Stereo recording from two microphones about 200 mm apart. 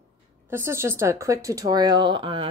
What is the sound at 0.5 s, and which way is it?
Speech, 10° right (ahead or behind).